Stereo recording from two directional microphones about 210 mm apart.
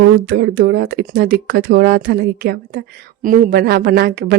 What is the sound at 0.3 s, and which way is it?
Speech, 50° right (ahead or behind).